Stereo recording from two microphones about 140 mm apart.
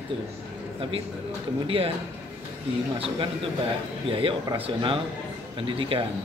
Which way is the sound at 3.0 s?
40° right (ahead or behind).